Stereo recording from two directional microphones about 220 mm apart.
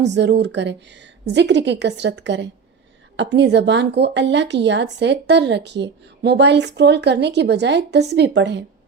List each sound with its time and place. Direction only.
0.0 s a woman's voice: 50° right (ahead or behind)